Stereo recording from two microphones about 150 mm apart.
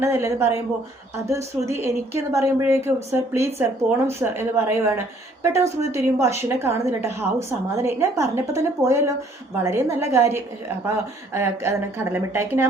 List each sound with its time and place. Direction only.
0.0 s a woman's voice: 15° right (ahead or behind)